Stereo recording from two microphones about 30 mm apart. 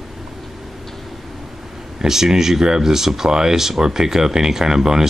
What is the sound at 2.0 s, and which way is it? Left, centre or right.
Speech, centre.